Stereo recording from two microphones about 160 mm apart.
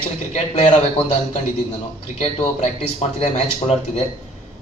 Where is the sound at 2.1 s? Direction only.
45° left (ahead or behind).